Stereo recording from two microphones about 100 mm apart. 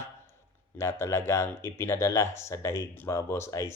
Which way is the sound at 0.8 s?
25° left (ahead or behind).